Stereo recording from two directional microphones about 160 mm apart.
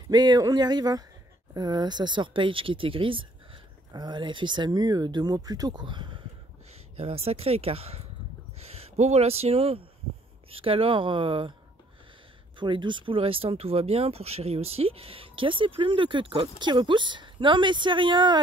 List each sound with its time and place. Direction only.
0.1 s speech: 25° right (ahead or behind)
12.5 s speech: 30° right (ahead or behind)